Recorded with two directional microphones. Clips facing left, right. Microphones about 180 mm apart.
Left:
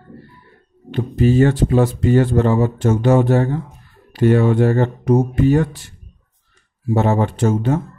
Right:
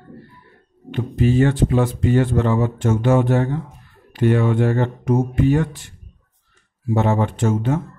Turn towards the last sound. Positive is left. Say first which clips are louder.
# left 2 dB
turn(degrees=35)  # may be behind; listen again after turning